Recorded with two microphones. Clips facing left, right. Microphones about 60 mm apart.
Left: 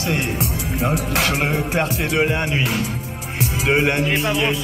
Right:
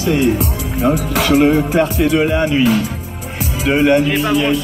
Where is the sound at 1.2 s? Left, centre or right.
Left.